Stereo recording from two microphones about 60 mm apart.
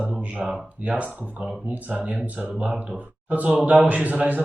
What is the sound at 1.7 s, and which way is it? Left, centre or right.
Speech, right.